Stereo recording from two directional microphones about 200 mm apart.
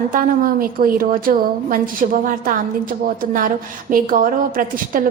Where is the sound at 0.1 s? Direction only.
45° right (ahead or behind).